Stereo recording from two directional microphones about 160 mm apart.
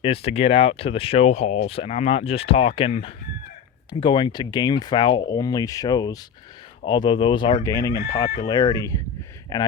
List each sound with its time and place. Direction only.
0.0 s speech: 35° left (ahead or behind)
7.6 s speech: 20° left (ahead or behind)